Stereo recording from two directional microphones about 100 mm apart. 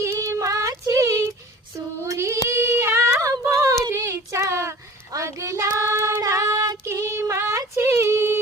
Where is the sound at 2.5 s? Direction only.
25° right (ahead or behind).